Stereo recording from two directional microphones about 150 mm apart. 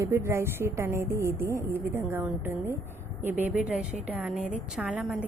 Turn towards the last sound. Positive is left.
turn(degrees=-10)  # may be behind; listen again after turning